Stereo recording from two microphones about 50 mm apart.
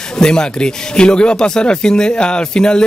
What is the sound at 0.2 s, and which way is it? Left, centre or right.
Speech, centre.